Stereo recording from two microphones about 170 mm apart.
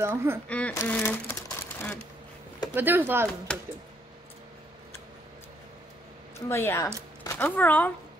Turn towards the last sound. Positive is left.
turn(degrees=10)  # may be behind; listen again after turning